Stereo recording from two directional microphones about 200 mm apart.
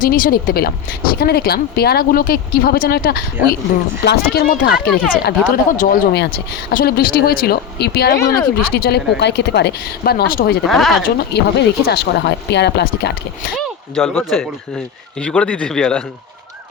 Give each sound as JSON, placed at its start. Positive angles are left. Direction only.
{"t": 0.0, "sound": "speech", "side_deg": 45}
{"t": 5.7, "sound": "speech", "side_deg": 40}
{"t": 10.7, "sound": "speech", "side_deg": 0}
{"t": 11.0, "sound": "speech", "side_deg": 55}
{"t": 13.6, "sound": "speech", "side_deg": 0}